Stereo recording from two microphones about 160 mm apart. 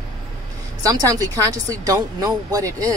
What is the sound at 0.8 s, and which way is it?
Speech, 20° right (ahead or behind).